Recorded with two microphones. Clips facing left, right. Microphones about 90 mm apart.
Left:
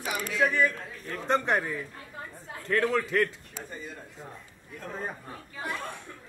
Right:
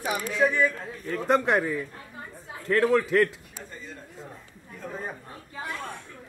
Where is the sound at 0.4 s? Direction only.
5° right (ahead or behind).